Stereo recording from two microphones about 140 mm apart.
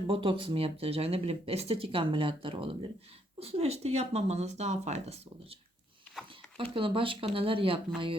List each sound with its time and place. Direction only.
0.1 s speech: 40° right (ahead or behind)
6.6 s speech: 40° right (ahead or behind)